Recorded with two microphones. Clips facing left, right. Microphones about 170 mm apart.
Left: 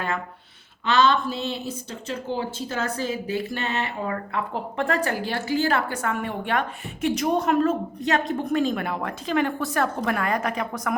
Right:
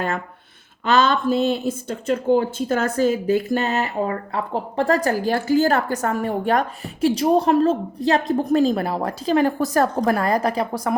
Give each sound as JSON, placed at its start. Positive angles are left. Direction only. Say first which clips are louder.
{"t": 0.9, "sound": "a woman's voice", "louder": "right 3 dB", "side_deg": -50}